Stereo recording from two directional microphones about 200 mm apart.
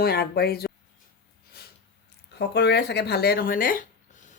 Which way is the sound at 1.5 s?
50° left (ahead or behind).